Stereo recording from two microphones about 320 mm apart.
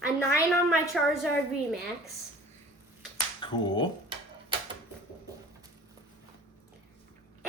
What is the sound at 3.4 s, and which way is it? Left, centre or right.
Speech, centre.